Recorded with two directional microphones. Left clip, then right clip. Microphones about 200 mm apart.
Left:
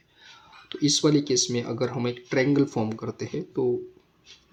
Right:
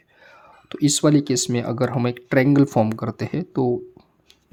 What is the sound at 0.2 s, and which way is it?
Speech, 40° right (ahead or behind).